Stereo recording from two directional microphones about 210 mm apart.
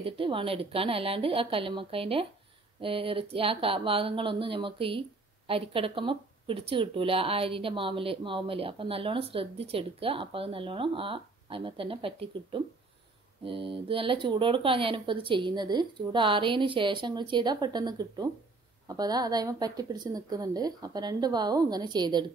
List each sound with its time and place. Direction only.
0.0 s speech: 25° right (ahead or behind)